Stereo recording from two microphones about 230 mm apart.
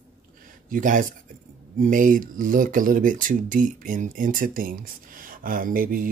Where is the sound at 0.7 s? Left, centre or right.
Right.